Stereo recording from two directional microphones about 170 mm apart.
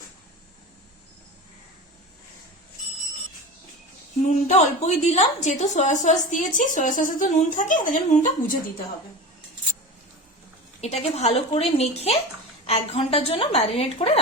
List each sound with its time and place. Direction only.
4.3 s a woman's voice: 45° left (ahead or behind)
10.8 s a woman's voice: 40° left (ahead or behind)